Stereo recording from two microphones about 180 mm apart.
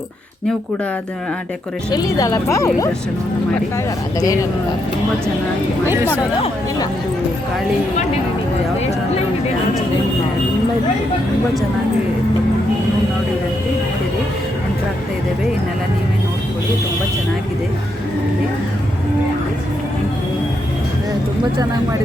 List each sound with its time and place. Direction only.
1.9 s a woman's voice: 20° left (ahead or behind)
4.2 s a woman's voice: 20° left (ahead or behind)